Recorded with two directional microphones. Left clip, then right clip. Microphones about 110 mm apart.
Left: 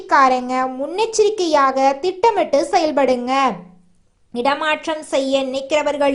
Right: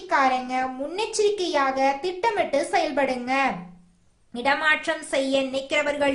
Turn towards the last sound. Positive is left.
turn(degrees=45)  # may be behind; listen again after turning